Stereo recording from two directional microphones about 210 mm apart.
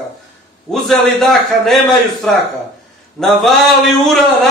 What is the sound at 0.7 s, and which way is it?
Speech, centre (ahead or behind).